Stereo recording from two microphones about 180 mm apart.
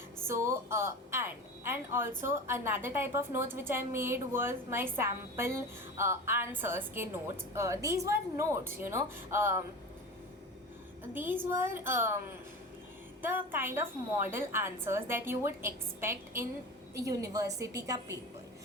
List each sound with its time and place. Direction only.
0.3 s a woman's voice: 15° right (ahead or behind)
11.1 s a woman's voice: 10° right (ahead or behind)
13.2 s a woman's voice: 10° right (ahead or behind)